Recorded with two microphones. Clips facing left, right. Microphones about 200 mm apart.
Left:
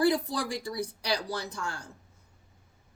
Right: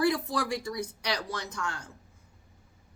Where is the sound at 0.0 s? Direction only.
35° left (ahead or behind).